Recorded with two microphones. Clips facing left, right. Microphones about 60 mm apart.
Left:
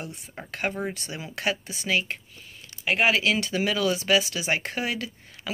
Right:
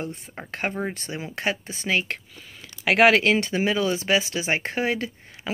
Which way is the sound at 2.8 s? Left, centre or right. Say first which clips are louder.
Right 6 dB; right.